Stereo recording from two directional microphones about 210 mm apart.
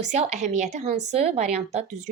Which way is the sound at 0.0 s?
35° right (ahead or behind).